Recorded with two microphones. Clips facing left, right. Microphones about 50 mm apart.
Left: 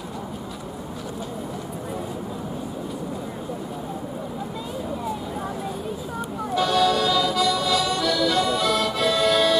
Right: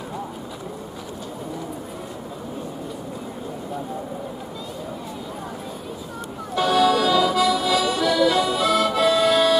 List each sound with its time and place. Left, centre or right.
6.5 s music: centre